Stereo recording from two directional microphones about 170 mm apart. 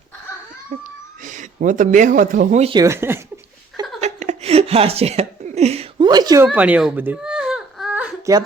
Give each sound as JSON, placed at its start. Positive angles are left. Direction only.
{"t": 1.2, "sound": "speech", "side_deg": -50}
{"t": 2.8, "sound": "speech", "side_deg": -15}
{"t": 4.0, "sound": "a sound", "side_deg": -40}
{"t": 6.1, "sound": "speech", "side_deg": -25}
{"t": 6.5, "sound": "baby cry", "side_deg": -10}